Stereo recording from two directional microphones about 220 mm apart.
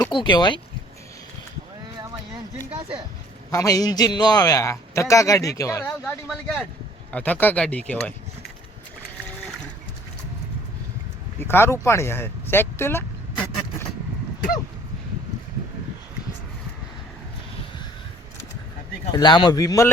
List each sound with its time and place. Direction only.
0.0 s speech: 20° left (ahead or behind)
2.0 s a sound: 20° right (ahead or behind)
3.5 s a man's voice: 15° left (ahead or behind)
6.2 s a man's voice: centre (ahead or behind)
11.3 s a man's voice: 10° left (ahead or behind)
19.1 s a man's voice: 20° left (ahead or behind)